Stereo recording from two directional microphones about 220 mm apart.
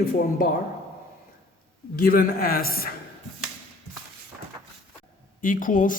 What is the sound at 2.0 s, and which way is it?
Speech, 40° left (ahead or behind).